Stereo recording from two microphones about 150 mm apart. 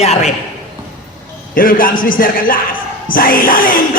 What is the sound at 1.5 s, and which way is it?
Speech, 65° left (ahead or behind).